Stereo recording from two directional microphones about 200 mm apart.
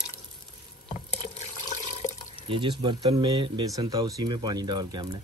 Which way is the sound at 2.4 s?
25° right (ahead or behind).